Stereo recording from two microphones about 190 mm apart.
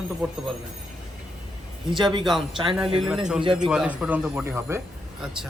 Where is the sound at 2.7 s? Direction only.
5° right (ahead or behind).